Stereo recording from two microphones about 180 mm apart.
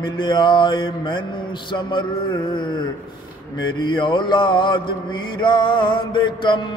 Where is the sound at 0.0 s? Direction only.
25° left (ahead or behind).